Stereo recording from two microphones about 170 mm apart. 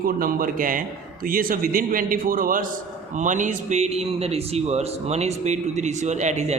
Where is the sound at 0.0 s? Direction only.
55° right (ahead or behind).